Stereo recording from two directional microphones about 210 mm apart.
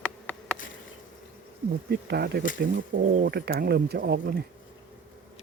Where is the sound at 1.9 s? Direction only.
50° right (ahead or behind).